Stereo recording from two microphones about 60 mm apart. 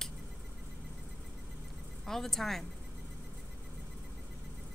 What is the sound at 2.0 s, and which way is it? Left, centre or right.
Speech, centre.